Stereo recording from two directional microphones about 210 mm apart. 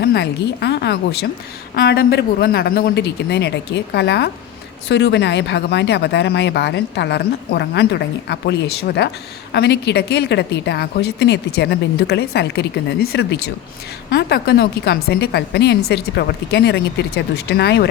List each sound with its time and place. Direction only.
0.0 s speech: 50° left (ahead or behind)